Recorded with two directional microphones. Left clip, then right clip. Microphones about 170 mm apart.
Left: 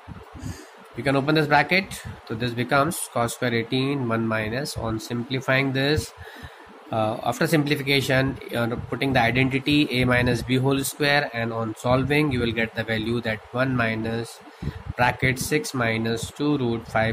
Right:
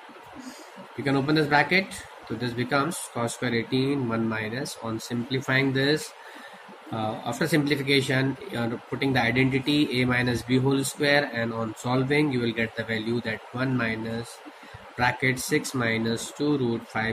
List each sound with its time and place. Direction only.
1.0 s speech: 55° left (ahead or behind)